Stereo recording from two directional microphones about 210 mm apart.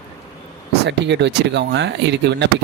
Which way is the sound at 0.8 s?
55° right (ahead or behind).